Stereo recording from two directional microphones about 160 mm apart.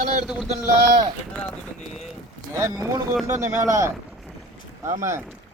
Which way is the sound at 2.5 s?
15° right (ahead or behind).